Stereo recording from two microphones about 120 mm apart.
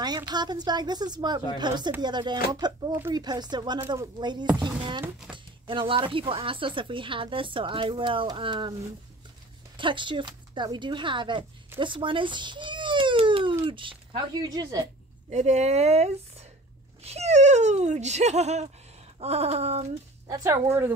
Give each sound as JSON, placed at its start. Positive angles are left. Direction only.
{"t": 0.3, "sound": "a woman's voice", "side_deg": -35}
{"t": 2.9, "sound": "speech", "side_deg": -20}
{"t": 3.2, "sound": "a woman's voice", "side_deg": -35}
{"t": 9.8, "sound": "speech", "side_deg": -45}
{"t": 11.8, "sound": "baby cry", "side_deg": -45}
{"t": 13.7, "sound": "speech", "side_deg": -45}
{"t": 15.2, "sound": "speech", "side_deg": -70}
{"t": 19.1, "sound": "a sound", "side_deg": -60}
{"t": 20.2, "sound": "speech", "side_deg": -25}